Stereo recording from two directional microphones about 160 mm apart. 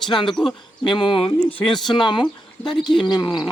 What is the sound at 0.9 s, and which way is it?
Speech, 30° left (ahead or behind).